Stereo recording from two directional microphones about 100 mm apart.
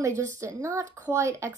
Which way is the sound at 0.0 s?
30° right (ahead or behind).